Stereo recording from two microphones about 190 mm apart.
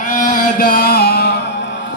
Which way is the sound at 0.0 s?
45° left (ahead or behind).